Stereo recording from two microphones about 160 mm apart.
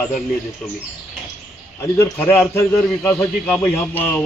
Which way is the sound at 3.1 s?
5° left (ahead or behind).